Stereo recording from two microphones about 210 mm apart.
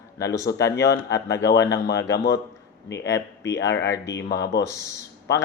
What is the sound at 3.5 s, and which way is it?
Speech, 55° left (ahead or behind).